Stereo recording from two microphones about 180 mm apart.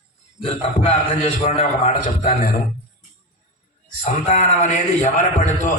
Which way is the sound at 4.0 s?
40° left (ahead or behind).